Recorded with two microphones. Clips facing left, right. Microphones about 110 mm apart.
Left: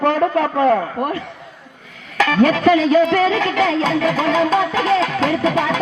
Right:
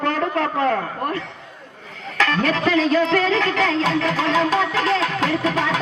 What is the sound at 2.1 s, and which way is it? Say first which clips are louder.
A man's voice: left 5 dB; 10° left (ahead or behind).